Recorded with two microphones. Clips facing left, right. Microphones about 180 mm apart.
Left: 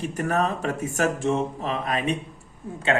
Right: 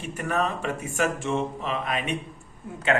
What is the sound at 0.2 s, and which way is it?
Speech, 40° left (ahead or behind).